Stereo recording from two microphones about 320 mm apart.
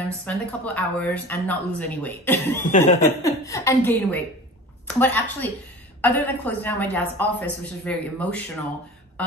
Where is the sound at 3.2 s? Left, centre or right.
Centre.